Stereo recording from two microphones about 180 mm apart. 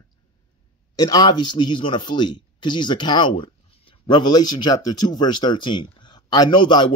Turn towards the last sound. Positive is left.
turn(degrees=25)  # may be behind; listen again after turning